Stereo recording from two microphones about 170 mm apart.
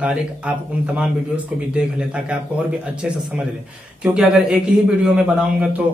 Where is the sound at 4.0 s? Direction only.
5° right (ahead or behind).